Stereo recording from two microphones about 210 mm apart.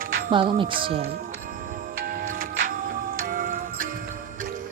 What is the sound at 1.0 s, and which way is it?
Music, 45° right (ahead or behind).